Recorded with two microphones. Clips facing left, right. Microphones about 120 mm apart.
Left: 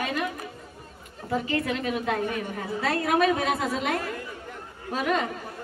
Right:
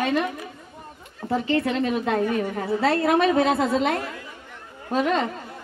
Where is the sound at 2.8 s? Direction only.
30° right (ahead or behind).